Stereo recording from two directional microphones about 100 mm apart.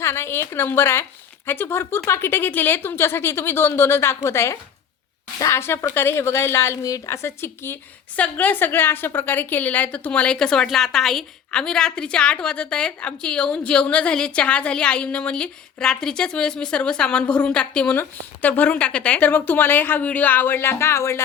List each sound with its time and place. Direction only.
0.0 s a woman's voice: 25° left (ahead or behind)